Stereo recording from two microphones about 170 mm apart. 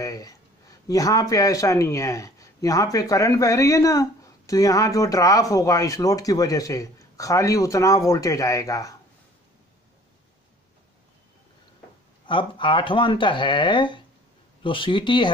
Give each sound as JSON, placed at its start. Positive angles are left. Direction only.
{"t": 0.0, "sound": "a man's voice", "side_deg": 20}
{"t": 12.3, "sound": "a man's voice", "side_deg": 30}